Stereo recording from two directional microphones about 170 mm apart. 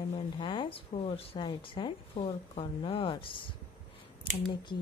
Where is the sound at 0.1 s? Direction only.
30° left (ahead or behind).